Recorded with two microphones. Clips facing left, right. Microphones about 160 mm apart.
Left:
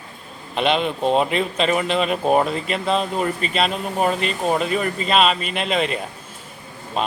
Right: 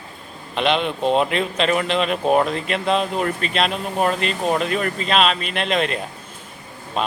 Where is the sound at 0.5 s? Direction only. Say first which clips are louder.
Even; centre (ahead or behind).